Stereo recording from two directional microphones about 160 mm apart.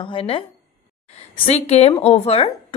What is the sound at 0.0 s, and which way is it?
Speech, 35° left (ahead or behind).